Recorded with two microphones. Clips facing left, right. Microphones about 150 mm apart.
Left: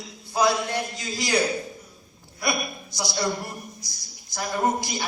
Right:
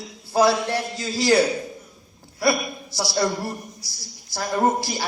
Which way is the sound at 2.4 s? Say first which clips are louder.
Right 6 dB; 20° left (ahead or behind).